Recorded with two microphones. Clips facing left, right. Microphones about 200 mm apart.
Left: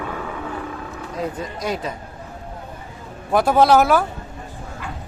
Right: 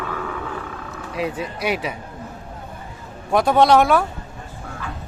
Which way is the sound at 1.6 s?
70° right (ahead or behind).